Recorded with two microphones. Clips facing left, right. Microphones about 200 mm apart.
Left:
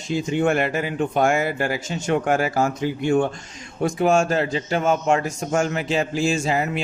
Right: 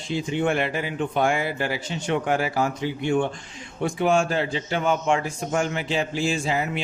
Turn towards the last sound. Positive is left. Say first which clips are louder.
# left 3 dB
turn(degrees=45)  # may be behind; listen again after turning